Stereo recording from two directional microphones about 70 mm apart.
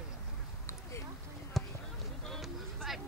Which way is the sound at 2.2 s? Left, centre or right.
Centre.